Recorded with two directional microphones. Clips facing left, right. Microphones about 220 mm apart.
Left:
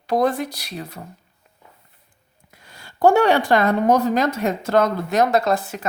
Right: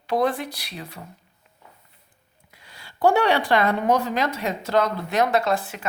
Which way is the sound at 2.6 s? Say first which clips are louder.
Left 4 dB; 45° left (ahead or behind).